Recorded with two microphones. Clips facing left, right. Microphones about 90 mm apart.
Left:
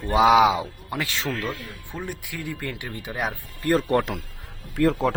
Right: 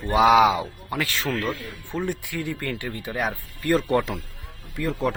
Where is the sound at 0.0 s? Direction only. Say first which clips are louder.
Even; 20° left (ahead or behind).